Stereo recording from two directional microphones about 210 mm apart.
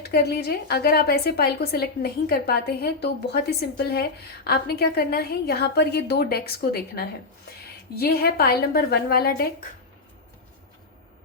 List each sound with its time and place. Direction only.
0.1 s a woman's voice: 50° left (ahead or behind)
4.4 s a woman's voice: 50° left (ahead or behind)